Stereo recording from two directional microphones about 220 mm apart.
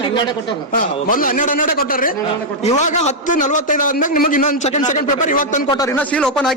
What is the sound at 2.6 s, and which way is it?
A man's voice, 30° left (ahead or behind).